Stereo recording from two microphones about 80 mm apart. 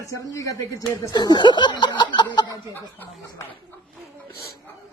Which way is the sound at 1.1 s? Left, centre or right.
Left.